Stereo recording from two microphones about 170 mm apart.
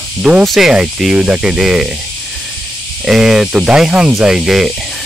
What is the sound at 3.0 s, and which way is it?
Speech, 5° right (ahead or behind).